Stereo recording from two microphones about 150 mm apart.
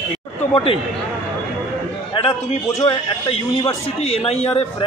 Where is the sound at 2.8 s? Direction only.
40° left (ahead or behind).